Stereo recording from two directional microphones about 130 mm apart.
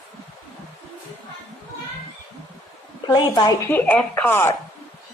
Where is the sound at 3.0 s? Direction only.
30° left (ahead or behind).